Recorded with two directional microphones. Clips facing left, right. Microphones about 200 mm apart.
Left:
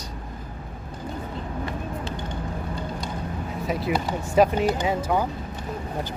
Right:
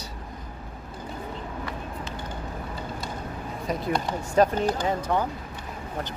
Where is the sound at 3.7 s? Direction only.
5° left (ahead or behind).